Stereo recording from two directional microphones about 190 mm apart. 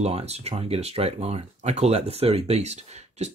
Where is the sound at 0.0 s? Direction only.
35° right (ahead or behind).